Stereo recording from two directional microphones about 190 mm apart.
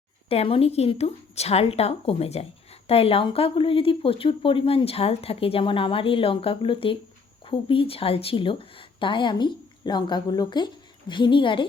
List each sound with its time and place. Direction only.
0.3 s speech: 30° left (ahead or behind)